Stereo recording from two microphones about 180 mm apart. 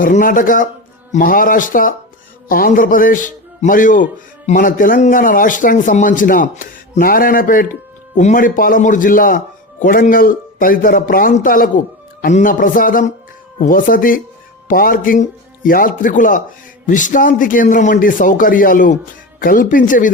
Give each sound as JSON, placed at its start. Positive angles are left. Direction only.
{"t": 0.0, "sound": "a man's voice", "side_deg": 50}